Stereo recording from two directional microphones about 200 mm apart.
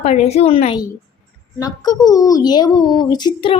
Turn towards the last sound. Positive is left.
turn(degrees=25)  # may be behind; listen again after turning